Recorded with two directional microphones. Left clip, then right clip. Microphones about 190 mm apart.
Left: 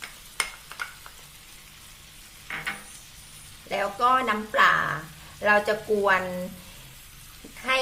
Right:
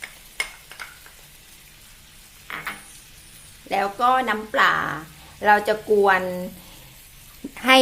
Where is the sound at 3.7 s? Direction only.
40° right (ahead or behind).